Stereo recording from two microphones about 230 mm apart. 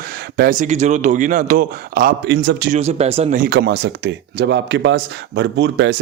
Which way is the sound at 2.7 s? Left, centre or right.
Right.